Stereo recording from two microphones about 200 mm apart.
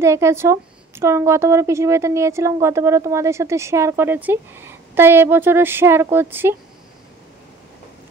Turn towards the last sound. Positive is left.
turn(degrees=-10)  # may be behind; listen again after turning